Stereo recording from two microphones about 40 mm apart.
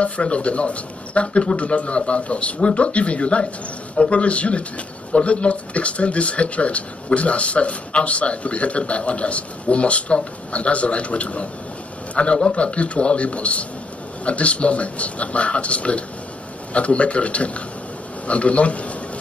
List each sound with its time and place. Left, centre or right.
0.0 s a man's voice: left